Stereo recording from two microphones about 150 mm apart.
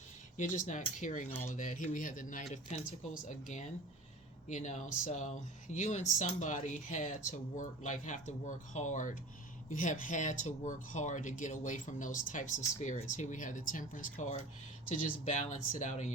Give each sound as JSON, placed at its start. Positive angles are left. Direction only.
{"t": 0.3, "sound": "speech", "side_deg": 55}